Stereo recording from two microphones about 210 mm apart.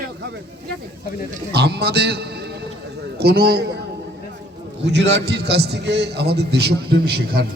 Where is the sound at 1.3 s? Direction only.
50° right (ahead or behind).